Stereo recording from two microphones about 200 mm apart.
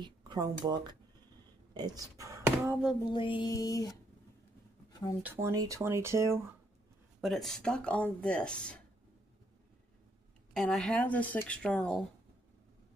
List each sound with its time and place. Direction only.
0.0 s speech: 20° right (ahead or behind); by 3.0 s 5° right (ahead or behind)
3.1 s music: 25° left (ahead or behind)
5.2 s speech: 10° right (ahead or behind)
7.2 s speech: centre (ahead or behind)
10.5 s speech: centre (ahead or behind)